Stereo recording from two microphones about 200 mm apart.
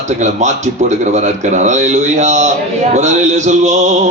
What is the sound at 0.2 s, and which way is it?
Mantra, 35° right (ahead or behind).